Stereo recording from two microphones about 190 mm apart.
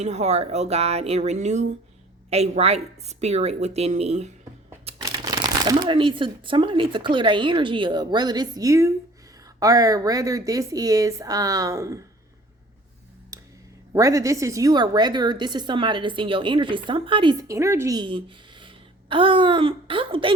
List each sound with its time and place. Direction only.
0.0 s a woman's voice: 35° right (ahead or behind)
4.9 s a woman's voice: 20° right (ahead or behind)
13.3 s a sound: 15° right (ahead or behind)
13.9 s speech: 15° right (ahead or behind)
17.5 s a woman's voice: 15° right (ahead or behind)